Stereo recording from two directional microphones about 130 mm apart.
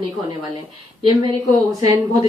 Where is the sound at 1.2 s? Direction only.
30° right (ahead or behind).